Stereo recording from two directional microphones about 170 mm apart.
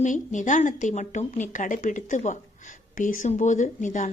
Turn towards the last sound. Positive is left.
turn(degrees=50)  # may be behind; listen again after turning